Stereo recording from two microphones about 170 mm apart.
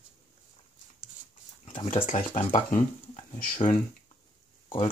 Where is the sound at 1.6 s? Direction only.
40° left (ahead or behind).